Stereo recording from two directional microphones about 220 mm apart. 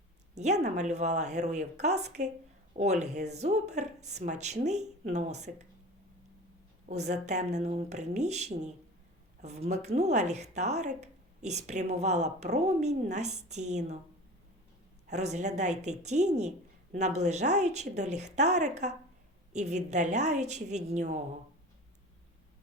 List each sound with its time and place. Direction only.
0.3 s speech: 30° right (ahead or behind)
7.1 s speech: 30° right (ahead or behind)
15.0 s speech: 30° right (ahead or behind)